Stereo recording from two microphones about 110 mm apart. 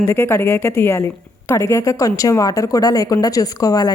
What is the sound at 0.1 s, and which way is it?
A woman's voice, 20° left (ahead or behind).